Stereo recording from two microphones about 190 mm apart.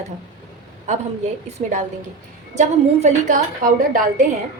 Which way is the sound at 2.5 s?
35° right (ahead or behind).